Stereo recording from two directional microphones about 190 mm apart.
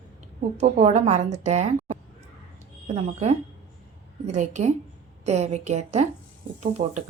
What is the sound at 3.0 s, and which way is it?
A woman's voice, 35° right (ahead or behind).